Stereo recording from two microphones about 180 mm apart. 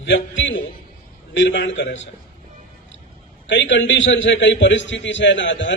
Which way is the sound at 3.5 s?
85° left.